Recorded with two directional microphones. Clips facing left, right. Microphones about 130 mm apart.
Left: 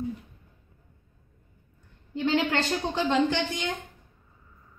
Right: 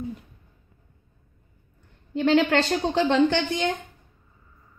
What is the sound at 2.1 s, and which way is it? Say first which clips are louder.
A woman's voice: right 6 dB; 70° right (ahead or behind).